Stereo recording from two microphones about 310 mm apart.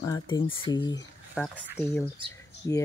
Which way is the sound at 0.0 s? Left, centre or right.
Centre.